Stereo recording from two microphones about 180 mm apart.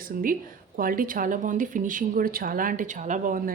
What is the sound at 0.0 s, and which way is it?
Speech, 50° right (ahead or behind).